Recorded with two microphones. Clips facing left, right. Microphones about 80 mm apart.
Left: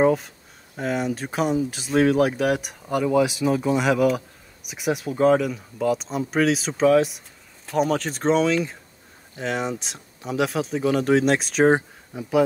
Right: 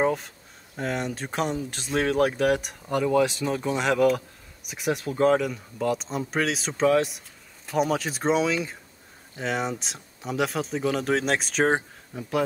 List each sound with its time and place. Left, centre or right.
0.0 s speech: centre